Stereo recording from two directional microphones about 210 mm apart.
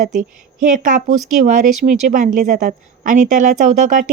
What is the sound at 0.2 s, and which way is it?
Speech, 35° right (ahead or behind).